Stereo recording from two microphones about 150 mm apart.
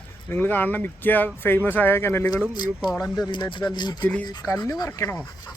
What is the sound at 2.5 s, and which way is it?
Speech, 30° left (ahead or behind).